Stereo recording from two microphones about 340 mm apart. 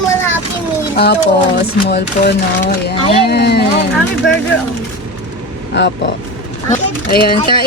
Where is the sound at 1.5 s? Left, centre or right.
Left.